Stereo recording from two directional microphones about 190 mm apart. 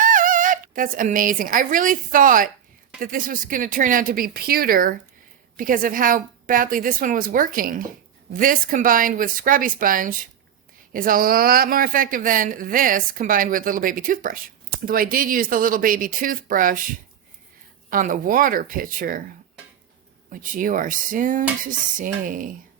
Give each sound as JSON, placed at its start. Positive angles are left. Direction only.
{"t": 0.0, "sound": "a woman's voice", "side_deg": -45}
{"t": 17.8, "sound": "a woman's voice", "side_deg": -45}
{"t": 20.3, "sound": "a woman's voice", "side_deg": -45}